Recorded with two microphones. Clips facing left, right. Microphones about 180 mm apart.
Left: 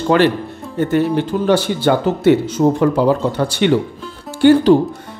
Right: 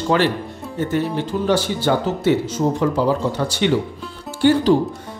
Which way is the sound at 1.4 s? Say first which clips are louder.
Left 3 dB; 60° left (ahead or behind).